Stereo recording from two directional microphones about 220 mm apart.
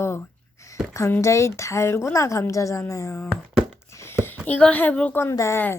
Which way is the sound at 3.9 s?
10° left (ahead or behind).